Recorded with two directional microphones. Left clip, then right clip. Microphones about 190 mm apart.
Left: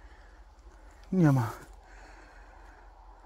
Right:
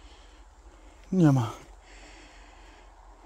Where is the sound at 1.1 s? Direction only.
5° right (ahead or behind).